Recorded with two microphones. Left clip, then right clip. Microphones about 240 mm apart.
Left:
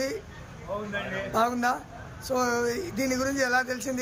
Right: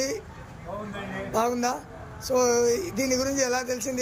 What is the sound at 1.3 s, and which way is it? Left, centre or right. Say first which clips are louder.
Speech: even; centre.